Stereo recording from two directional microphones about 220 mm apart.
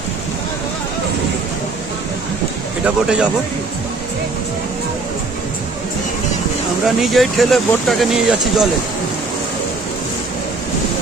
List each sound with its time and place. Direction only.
2.8 s speech: 5° right (ahead or behind)
7.0 s speech: centre (ahead or behind)